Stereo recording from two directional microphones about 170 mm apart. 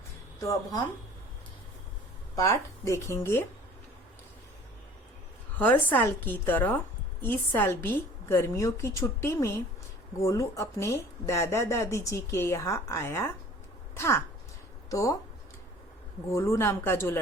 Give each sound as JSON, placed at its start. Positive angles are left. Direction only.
{"t": 0.3, "sound": "speech", "side_deg": 20}
{"t": 2.3, "sound": "speech", "side_deg": 20}
{"t": 5.5, "sound": "speech", "side_deg": 10}
{"t": 16.3, "sound": "speech", "side_deg": 15}